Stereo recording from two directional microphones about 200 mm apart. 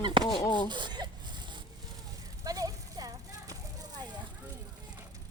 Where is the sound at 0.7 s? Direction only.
20° right (ahead or behind).